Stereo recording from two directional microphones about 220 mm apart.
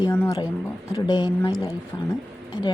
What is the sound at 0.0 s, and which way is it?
A woman's voice, 15° left (ahead or behind).